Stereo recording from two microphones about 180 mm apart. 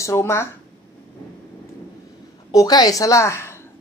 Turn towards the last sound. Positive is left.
turn(degrees=15)  # may be behind; listen again after turning